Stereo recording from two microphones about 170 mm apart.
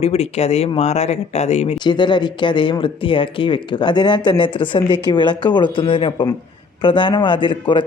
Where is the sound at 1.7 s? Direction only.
25° left (ahead or behind).